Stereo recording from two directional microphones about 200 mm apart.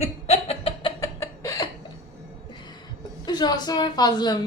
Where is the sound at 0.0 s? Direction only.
30° left (ahead or behind).